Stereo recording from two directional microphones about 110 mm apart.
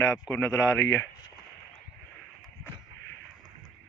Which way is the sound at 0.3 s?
30° left (ahead or behind).